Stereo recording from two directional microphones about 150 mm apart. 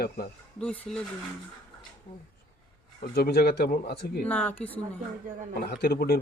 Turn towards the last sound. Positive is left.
turn(degrees=90)